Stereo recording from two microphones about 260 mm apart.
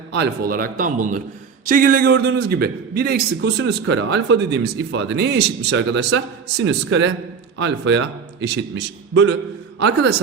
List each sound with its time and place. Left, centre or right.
0.1 s a man's voice: right
9.8 s a man's voice: right